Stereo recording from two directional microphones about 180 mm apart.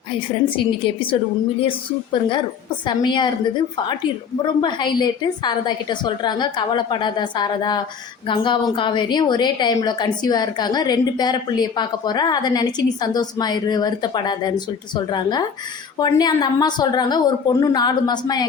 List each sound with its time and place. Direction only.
0.1 s a woman's voice: 30° left (ahead or behind)
2.8 s a woman's voice: 25° left (ahead or behind)
4.4 s a woman's voice: 25° left (ahead or behind)